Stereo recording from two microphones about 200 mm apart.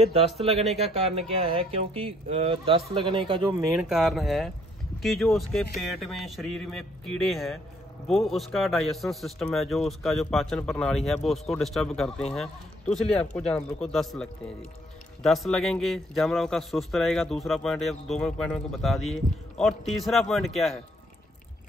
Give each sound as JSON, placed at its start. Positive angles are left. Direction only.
{"t": 0.0, "sound": "speech", "side_deg": -30}
{"t": 3.6, "sound": "a man's voice", "side_deg": 0}